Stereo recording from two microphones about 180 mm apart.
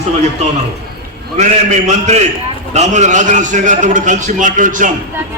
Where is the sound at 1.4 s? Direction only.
40° right (ahead or behind).